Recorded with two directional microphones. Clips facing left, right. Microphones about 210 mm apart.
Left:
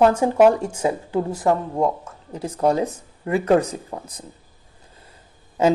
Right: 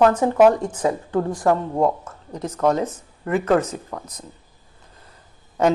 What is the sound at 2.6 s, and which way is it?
Speech, 10° left (ahead or behind).